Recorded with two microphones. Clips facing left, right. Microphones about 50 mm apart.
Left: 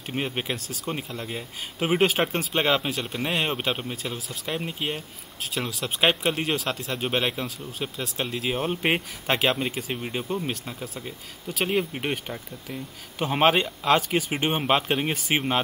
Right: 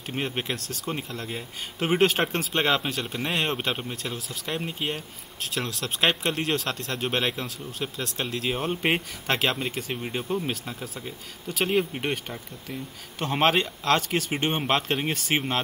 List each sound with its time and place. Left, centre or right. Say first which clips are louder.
0.0 s speech: left 1 dB; centre